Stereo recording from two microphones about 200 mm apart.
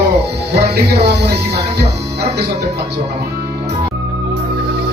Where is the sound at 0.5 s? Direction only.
55° right (ahead or behind).